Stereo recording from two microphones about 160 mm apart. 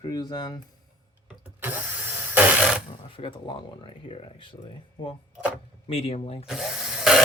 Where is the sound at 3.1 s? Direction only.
35° left (ahead or behind).